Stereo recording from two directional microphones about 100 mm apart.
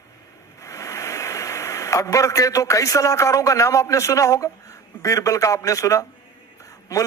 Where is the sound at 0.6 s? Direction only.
30° left (ahead or behind).